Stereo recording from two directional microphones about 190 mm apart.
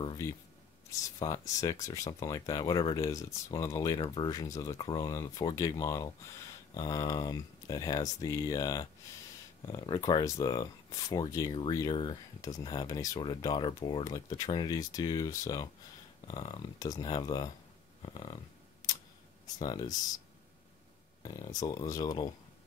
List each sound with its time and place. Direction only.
0.0 s speech: 25° left (ahead or behind)
19.6 s speech: 20° left (ahead or behind)
21.2 s speech: 20° left (ahead or behind)